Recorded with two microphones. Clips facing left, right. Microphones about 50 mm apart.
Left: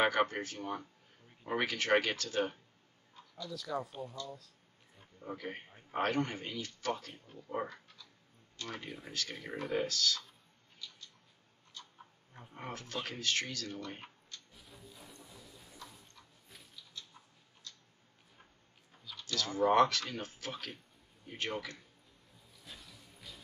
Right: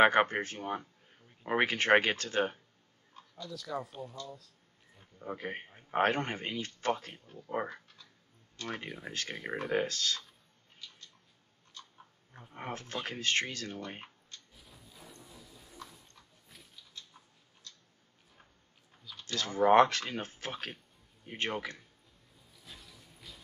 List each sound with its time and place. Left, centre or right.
0.0 s a man's voice: right
3.4 s speech: centre
5.2 s a man's voice: right
12.5 s a man's voice: right
14.5 s music: centre
19.2 s a man's voice: right
22.7 s a sound: centre